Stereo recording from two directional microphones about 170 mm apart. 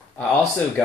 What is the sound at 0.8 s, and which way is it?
Speech, 5° left (ahead or behind).